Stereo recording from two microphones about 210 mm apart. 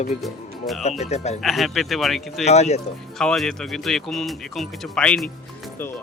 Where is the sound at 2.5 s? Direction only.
30° left (ahead or behind).